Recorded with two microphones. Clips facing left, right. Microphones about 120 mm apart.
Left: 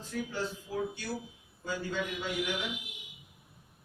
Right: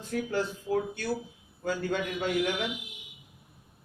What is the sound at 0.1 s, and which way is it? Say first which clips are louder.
Speech: right 5 dB; 60° right (ahead or behind).